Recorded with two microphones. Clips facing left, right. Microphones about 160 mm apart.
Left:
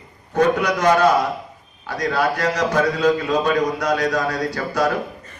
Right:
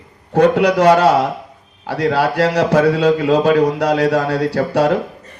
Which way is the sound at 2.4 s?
35° right (ahead or behind).